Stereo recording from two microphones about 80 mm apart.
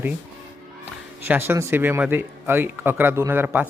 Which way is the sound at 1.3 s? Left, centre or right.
Right.